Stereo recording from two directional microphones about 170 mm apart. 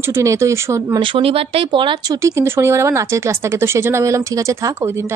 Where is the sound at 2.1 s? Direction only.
15° right (ahead or behind).